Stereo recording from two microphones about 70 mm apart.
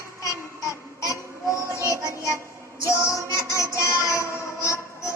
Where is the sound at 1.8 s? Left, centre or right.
Left.